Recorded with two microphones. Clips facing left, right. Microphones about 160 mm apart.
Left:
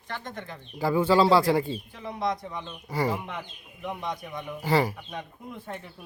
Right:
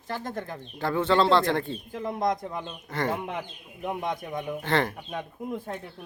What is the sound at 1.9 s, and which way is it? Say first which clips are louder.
Speech: right 4 dB; 45° right (ahead or behind).